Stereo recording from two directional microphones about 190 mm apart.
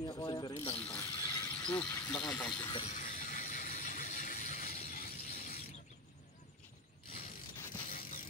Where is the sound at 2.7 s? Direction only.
30° left (ahead or behind).